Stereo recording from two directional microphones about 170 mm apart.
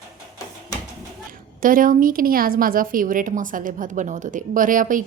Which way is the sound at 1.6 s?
55° right (ahead or behind).